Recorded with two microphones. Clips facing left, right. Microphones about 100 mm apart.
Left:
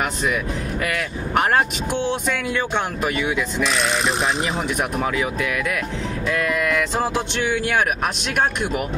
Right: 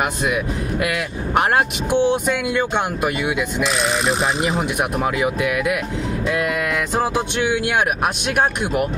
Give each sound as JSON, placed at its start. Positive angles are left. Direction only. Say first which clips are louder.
{"t": 1.5, "sound": "speech", "louder": "right 2 dB", "side_deg": -15}
{"t": 5.0, "sound": "speech", "louder": "right 3 dB", "side_deg": -15}
{"t": 6.6, "sound": "a sound", "louder": "even", "side_deg": -40}
{"t": 7.2, "sound": "speech", "louder": "right 2 dB", "side_deg": -15}